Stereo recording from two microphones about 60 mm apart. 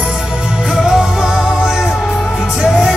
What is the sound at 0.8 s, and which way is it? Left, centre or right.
Music, centre.